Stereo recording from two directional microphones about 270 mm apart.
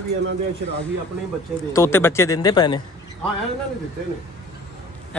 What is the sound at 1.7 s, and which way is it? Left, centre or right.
Speech, centre.